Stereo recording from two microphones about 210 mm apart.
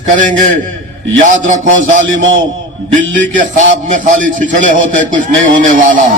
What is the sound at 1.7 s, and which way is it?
Speech, 65° right (ahead or behind).